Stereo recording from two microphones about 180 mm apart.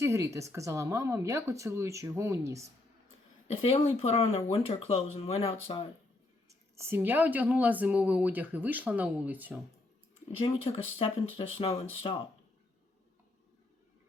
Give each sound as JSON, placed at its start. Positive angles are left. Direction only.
{"t": 0.0, "sound": "a woman's voice", "side_deg": -15}
{"t": 3.6, "sound": "speech", "side_deg": 35}
{"t": 6.5, "sound": "a woman's voice", "side_deg": -15}
{"t": 10.4, "sound": "speech", "side_deg": 35}